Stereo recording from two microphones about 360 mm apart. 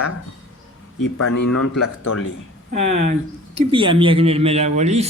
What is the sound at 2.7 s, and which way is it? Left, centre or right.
Speech, centre.